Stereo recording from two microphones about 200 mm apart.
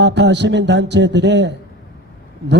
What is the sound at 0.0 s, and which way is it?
A man's voice, 60° right (ahead or behind).